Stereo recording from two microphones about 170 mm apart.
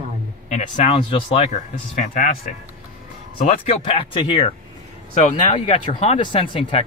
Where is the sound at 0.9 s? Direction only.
30° left (ahead or behind).